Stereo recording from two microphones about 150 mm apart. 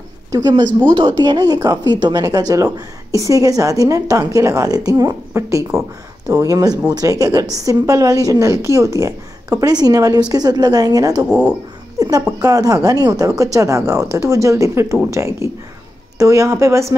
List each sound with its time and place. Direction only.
0.3 s a woman's voice: 25° right (ahead or behind)